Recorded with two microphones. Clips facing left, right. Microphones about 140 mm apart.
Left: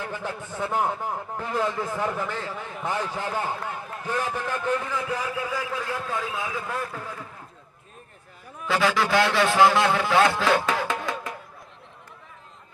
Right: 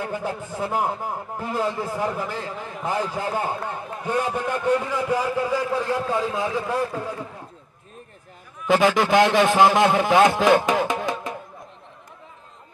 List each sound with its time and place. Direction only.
0.6 s a man's voice: 35° right (ahead or behind)
1.0 s a man's voice: 10° right (ahead or behind)
1.4 s a man's voice: 35° right (ahead or behind)
4.0 s a man's voice: 15° right (ahead or behind)
4.6 s a man's voice: 35° right (ahead or behind)
4.9 s a man's voice: 15° right (ahead or behind)
6.2 s a man's voice: 30° right (ahead or behind)
8.6 s a man's voice: 20° right (ahead or behind)